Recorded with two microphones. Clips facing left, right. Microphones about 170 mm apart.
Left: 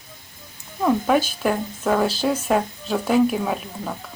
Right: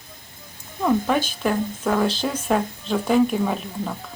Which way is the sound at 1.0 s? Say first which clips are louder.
Left 2 dB; 5° left (ahead or behind).